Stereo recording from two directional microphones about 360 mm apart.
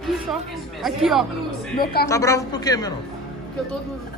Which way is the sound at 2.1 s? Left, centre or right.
Centre.